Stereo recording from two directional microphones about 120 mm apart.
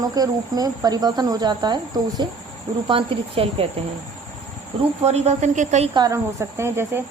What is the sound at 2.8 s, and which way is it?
Speech, 50° right (ahead or behind).